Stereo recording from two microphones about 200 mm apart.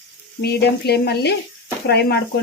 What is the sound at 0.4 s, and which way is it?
Speech, 55° left (ahead or behind).